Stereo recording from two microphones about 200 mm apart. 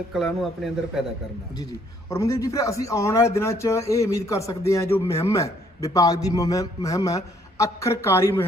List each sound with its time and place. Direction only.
0.1 s speech: centre (ahead or behind)
2.0 s speech: 15° left (ahead or behind)